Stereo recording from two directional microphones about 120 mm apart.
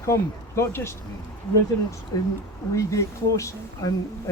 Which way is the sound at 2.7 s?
25° left (ahead or behind).